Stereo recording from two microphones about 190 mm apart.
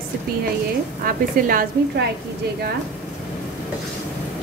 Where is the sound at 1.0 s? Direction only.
50° right (ahead or behind).